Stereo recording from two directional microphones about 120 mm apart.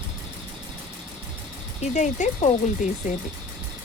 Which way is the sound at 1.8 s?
85° left.